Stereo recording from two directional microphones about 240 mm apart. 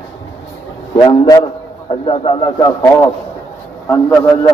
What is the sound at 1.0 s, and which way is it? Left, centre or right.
A man's voice, centre.